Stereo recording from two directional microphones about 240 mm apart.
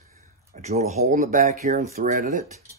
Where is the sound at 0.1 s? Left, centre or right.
Right.